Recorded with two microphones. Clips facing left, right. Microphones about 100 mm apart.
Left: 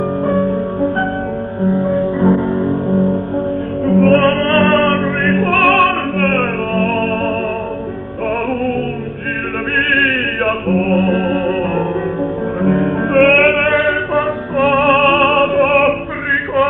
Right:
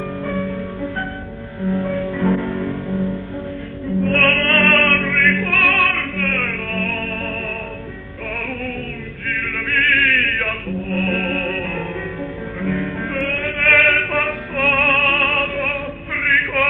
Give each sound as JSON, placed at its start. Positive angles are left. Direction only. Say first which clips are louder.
{"t": 0.3, "sound": "music", "louder": "left 8 dB", "side_deg": 40}
{"t": 1.6, "sound": "music", "louder": "left 6 dB", "side_deg": 25}
{"t": 2.9, "sound": "music", "louder": "left 8 dB", "side_deg": 40}
{"t": 3.8, "sound": "music", "louder": "left 9 dB", "side_deg": 55}
{"t": 4.1, "sound": "music", "louder": "left 7 dB", "side_deg": 25}
{"t": 9.7, "sound": "chant", "louder": "left 2 dB", "side_deg": 35}
{"t": 10.7, "sound": "music", "louder": "left 11 dB", "side_deg": 55}
{"t": 10.9, "sound": "music", "louder": "left 7 dB", "side_deg": 30}
{"t": 12.6, "sound": "music", "louder": "left 8 dB", "side_deg": 45}
{"t": 13.7, "sound": "music", "louder": "left 4 dB", "side_deg": 25}
{"t": 15.7, "sound": "music", "louder": "left 15 dB", "side_deg": 65}